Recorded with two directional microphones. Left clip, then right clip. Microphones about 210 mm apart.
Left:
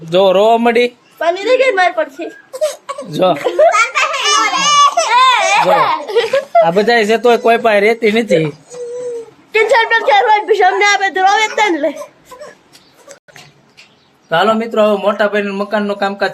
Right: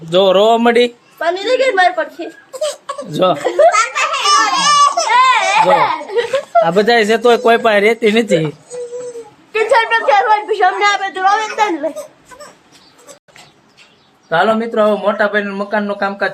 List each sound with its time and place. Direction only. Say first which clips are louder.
0.1 s a woman's voice: left 1 dB; centre (ahead or behind)
4.2 s baby cry: right 3 dB; centre (ahead or behind)
5.0 s a sound: left 1 dB; 30° left (ahead or behind)
6.3 s a woman's voice: left 1 dB; 5° right (ahead or behind)
9.5 s a woman's voice: left 2 dB; 25° left (ahead or behind)
14.3 s a woman's voice: left 1 dB; 5° left (ahead or behind)